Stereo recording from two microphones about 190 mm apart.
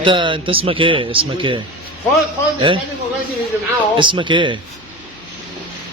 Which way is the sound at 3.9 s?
25° right (ahead or behind).